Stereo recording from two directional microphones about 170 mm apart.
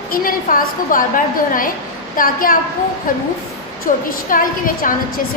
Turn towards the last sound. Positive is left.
turn(degrees=55)  # may be behind; listen again after turning